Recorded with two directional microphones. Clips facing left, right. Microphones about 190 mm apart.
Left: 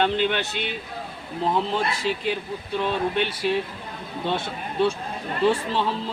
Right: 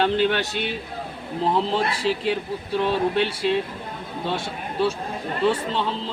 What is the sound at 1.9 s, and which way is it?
Speech, 30° right (ahead or behind).